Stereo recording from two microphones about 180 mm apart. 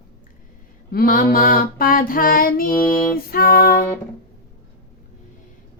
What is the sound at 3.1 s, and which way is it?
Music, 55° left (ahead or behind).